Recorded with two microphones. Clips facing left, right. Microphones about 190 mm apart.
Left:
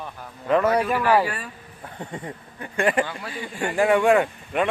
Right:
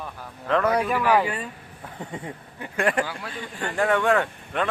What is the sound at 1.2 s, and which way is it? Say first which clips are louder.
Speech: right 1 dB; 20° right (ahead or behind).